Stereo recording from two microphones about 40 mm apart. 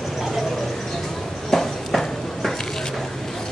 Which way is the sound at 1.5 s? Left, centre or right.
Centre.